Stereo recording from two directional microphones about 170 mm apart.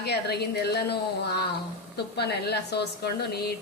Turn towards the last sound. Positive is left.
turn(degrees=70)  # may be behind; listen again after turning